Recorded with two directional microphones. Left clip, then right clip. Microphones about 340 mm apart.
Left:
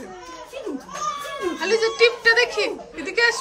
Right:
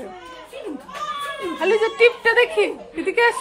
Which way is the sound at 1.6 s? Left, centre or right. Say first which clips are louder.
Right 2 dB; centre.